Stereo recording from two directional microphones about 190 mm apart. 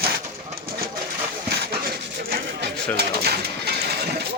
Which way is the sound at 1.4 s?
55° right (ahead or behind).